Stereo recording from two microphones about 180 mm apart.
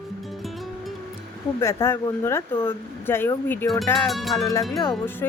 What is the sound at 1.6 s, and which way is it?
Speech, 15° left (ahead or behind).